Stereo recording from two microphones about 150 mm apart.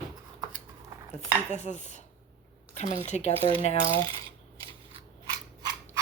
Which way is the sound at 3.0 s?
50° left (ahead or behind).